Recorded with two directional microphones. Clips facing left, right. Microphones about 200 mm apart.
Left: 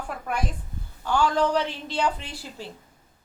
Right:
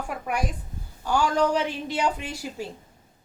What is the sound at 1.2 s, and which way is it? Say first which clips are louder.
Speech: even; 40° right (ahead or behind).